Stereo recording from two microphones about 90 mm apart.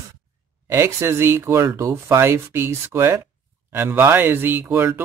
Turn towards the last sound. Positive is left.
turn(degrees=-25)  # may be behind; listen again after turning